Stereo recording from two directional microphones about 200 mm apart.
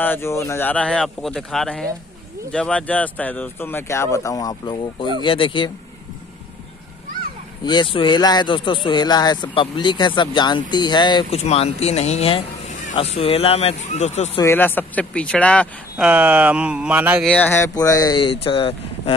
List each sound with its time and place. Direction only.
0.0 s speech: 10° left (ahead or behind)
7.6 s speech: 25° left (ahead or behind)
14.4 s speech: 10° left (ahead or behind)
16.1 s speech: 10° right (ahead or behind)
17.3 s speech: 10° left (ahead or behind); by 19.1 s 25° left (ahead or behind)